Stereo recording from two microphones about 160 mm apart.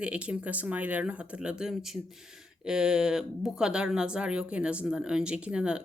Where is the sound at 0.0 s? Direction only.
5° right (ahead or behind).